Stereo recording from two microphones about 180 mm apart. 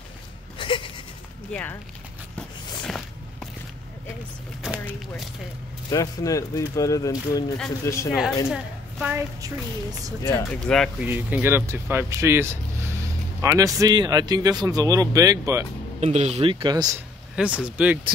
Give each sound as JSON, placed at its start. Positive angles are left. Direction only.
{"t": 0.6, "sound": "a sound", "side_deg": 25}
{"t": 1.5, "sound": "speech", "side_deg": 10}
{"t": 2.8, "sound": "walk", "side_deg": 5}
{"t": 4.6, "sound": "speech", "side_deg": 0}
{"t": 5.9, "sound": "speech", "side_deg": 20}
{"t": 8.5, "sound": "a woman's voice", "side_deg": -5}
{"t": 9.4, "sound": "speech", "side_deg": -20}
{"t": 10.2, "sound": "speech", "side_deg": 15}
{"t": 10.7, "sound": "speech", "side_deg": 5}
{"t": 11.1, "sound": "speech", "side_deg": -10}
{"t": 16.0, "sound": "speech", "side_deg": -40}
{"t": 17.6, "sound": "speech", "side_deg": -5}